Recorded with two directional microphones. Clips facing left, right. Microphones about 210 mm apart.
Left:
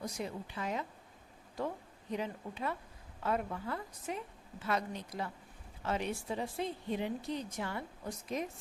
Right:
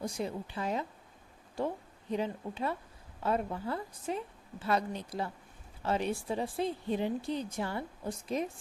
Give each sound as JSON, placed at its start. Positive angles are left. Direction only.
{"t": 0.0, "sound": "a woman's voice", "side_deg": -30}